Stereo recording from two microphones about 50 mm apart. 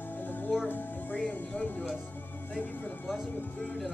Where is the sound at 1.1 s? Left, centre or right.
Left.